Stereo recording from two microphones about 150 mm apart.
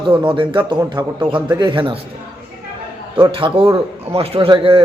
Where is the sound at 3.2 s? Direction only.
35° right (ahead or behind).